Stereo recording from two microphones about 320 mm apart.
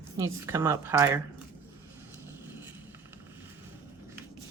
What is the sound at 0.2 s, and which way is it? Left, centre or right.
A woman's voice, centre.